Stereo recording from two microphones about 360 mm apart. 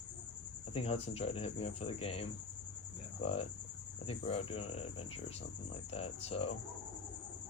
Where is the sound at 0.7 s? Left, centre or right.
Centre.